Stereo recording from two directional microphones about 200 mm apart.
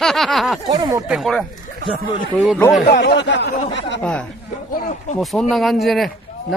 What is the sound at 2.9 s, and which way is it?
Speech, 60° left (ahead or behind).